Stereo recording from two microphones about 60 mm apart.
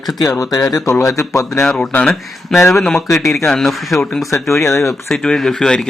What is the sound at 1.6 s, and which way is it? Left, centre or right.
A man's voice, centre.